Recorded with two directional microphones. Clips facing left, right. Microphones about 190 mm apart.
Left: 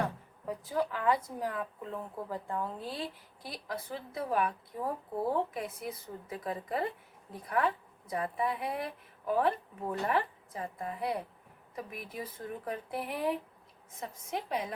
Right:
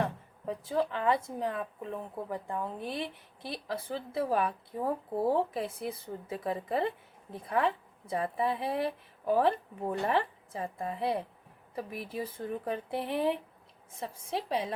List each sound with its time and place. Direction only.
0.4 s a woman's voice: 25° right (ahead or behind)